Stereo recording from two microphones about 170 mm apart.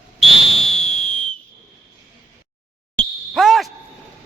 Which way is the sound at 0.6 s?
40° left (ahead or behind).